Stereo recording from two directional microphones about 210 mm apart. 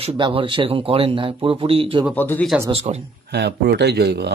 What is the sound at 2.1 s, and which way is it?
Speech, 10° left (ahead or behind).